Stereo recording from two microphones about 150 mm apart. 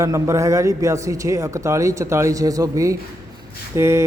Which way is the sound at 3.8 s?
20° right (ahead or behind).